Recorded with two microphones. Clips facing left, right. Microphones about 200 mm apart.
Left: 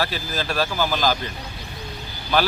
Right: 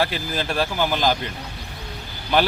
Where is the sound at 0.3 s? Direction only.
20° right (ahead or behind).